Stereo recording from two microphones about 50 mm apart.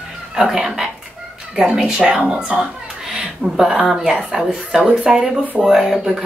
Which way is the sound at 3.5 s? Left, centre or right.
Centre.